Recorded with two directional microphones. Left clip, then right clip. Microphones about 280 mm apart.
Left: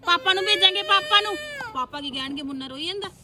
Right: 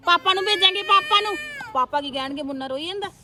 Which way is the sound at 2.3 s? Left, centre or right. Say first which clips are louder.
Right 4 dB; right.